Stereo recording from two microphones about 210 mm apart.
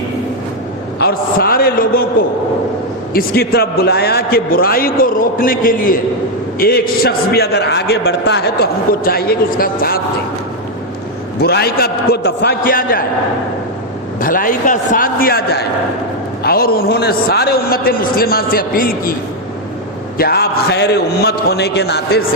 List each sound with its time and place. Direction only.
0.9 s a man's voice: 50° left (ahead or behind)
11.3 s a man's voice: 50° left (ahead or behind)
14.2 s a man's voice: 40° left (ahead or behind)
20.1 s a man's voice: 45° left (ahead or behind)